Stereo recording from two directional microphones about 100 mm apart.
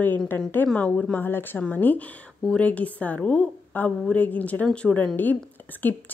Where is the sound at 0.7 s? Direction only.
15° left (ahead or behind).